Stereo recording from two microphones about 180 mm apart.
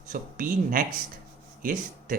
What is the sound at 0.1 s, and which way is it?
Speech, 45° right (ahead or behind).